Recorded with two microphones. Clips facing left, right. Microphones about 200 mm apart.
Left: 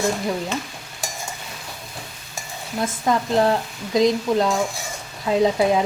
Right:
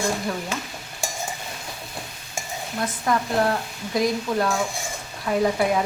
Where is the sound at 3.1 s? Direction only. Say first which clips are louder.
Left 3 dB; 25° left (ahead or behind).